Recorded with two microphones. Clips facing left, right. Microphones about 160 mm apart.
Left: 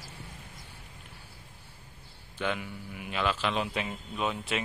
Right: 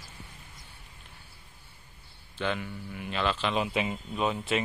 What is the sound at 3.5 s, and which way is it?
A man's voice, 5° right (ahead or behind).